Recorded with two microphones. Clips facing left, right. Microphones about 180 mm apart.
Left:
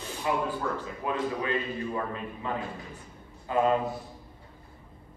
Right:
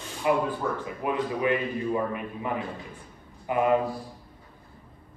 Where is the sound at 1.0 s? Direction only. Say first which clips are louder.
Right 4 dB; 15° right (ahead or behind).